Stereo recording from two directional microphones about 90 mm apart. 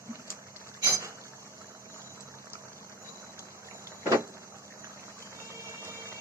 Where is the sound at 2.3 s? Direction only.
30° right (ahead or behind).